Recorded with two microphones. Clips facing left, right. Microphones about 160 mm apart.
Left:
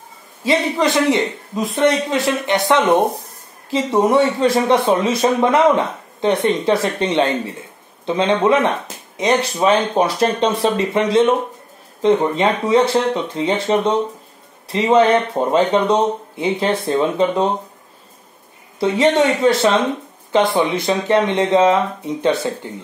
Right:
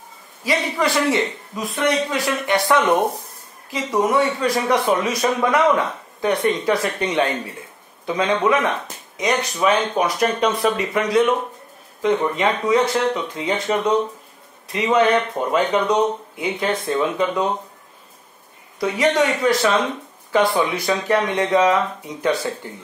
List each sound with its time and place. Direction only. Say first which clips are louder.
0.4 s speech: left 4 dB; 25° left (ahead or behind)
18.8 s speech: left 4 dB; 25° left (ahead or behind)